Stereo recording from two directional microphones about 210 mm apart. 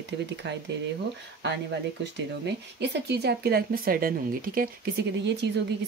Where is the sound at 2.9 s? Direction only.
50° right (ahead or behind).